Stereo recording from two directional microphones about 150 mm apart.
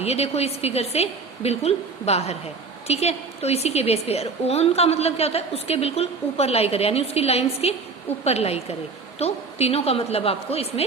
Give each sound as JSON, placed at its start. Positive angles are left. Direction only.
{"t": 0.0, "sound": "a woman's voice", "side_deg": 45}